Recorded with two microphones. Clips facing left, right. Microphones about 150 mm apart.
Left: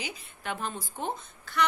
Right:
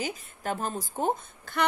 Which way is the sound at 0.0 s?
45° right (ahead or behind).